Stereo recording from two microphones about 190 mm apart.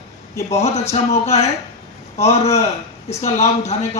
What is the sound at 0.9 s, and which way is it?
A man's voice, 35° left (ahead or behind).